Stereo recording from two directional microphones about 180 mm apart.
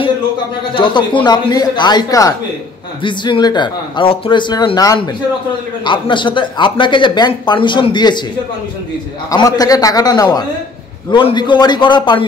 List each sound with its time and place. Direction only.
0.7 s speech: 25° left (ahead or behind)
9.3 s speech: 20° left (ahead or behind)